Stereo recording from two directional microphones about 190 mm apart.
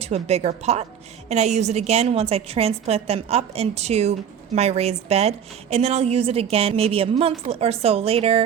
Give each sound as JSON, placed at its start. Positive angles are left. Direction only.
{"t": 0.0, "sound": "a woman's voice", "side_deg": -35}